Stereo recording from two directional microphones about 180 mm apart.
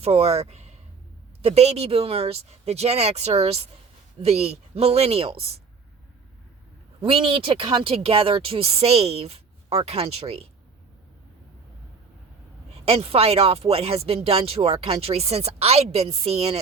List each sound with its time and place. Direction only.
0.0 s speech: 35° right (ahead or behind)
7.0 s speech: 30° right (ahead or behind)
12.7 s speech: 35° right (ahead or behind)